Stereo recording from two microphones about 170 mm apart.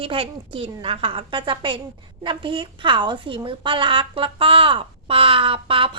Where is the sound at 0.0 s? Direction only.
30° right (ahead or behind).